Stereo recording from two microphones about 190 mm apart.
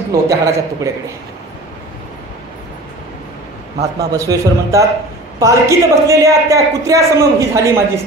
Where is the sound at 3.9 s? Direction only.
15° right (ahead or behind).